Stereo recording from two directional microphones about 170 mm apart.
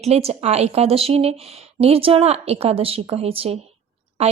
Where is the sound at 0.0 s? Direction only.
40° right (ahead or behind).